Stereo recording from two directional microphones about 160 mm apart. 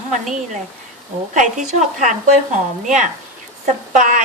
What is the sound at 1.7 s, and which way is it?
Speech, 50° right (ahead or behind).